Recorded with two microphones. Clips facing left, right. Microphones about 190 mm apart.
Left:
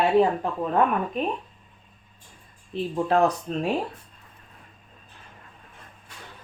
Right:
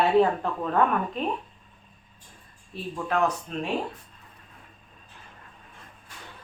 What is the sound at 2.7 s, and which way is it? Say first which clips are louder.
Speech: left 6 dB; 30° left (ahead or behind).